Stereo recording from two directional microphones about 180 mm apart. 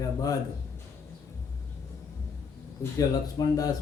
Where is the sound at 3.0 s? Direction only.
20° left (ahead or behind).